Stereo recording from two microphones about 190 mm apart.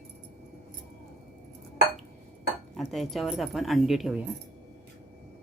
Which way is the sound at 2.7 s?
Centre (ahead or behind).